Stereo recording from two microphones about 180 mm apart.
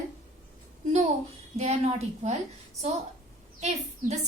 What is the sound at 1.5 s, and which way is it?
Speech, 40° right (ahead or behind).